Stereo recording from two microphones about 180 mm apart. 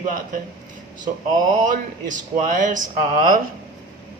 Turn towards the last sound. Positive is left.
turn(degrees=-50)  # may be behind; listen again after turning